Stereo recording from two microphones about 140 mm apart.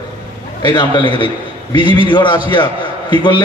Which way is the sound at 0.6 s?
30° left (ahead or behind).